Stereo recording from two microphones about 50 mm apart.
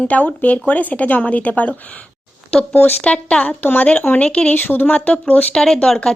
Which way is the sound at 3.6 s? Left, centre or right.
Left.